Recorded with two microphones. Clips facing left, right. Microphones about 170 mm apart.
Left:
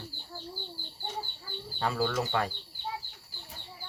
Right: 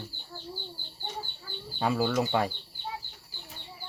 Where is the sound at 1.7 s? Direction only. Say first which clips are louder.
Right 3 dB; 15° right (ahead or behind).